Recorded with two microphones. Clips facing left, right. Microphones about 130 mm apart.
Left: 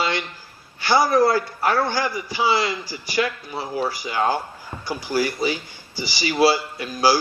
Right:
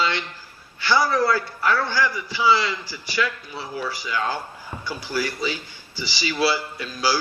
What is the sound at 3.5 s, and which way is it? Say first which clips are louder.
Speech: left 5 dB; 40° left (ahead or behind).